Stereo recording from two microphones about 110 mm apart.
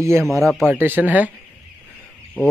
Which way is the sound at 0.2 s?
Centre (ahead or behind).